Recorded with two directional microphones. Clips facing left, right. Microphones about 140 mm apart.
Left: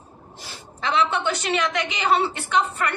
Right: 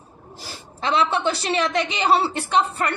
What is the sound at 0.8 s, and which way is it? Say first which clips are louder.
A woman's voice: right 1 dB; 30° right (ahead or behind).